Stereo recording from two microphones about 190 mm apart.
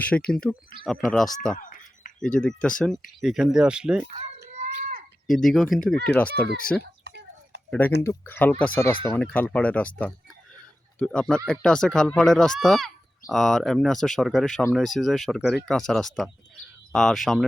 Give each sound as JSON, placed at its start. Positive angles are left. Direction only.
{"t": 0.0, "sound": "speech", "side_deg": 5}
{"t": 1.5, "sound": "a sound", "side_deg": 45}
{"t": 2.2, "sound": "speech", "side_deg": 5}
{"t": 4.1, "sound": "children playing", "side_deg": -40}
{"t": 5.3, "sound": "speech", "side_deg": 0}